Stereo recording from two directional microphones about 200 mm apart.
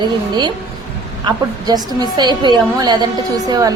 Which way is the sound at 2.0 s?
20° right (ahead or behind).